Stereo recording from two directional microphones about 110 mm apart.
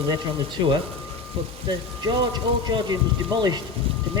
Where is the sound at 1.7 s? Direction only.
40° right (ahead or behind).